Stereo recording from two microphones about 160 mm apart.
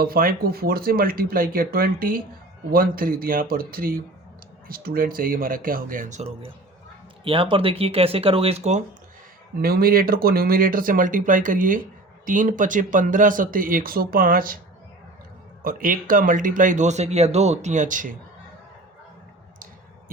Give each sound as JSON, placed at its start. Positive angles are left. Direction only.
{"t": 0.0, "sound": "speech", "side_deg": -65}
{"t": 9.6, "sound": "speech", "side_deg": -70}
{"t": 15.6, "sound": "speech", "side_deg": -60}